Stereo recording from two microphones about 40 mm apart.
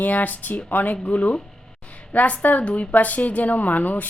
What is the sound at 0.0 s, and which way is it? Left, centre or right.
A woman's voice, left.